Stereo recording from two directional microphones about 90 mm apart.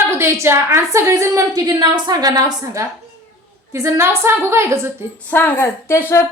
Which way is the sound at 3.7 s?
30° right (ahead or behind).